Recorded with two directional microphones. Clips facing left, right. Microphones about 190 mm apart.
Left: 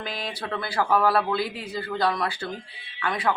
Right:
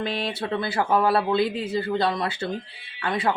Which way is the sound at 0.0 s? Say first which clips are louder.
Right 5 dB; 30° right (ahead or behind).